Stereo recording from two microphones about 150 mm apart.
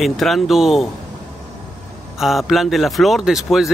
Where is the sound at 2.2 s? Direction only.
Centre (ahead or behind).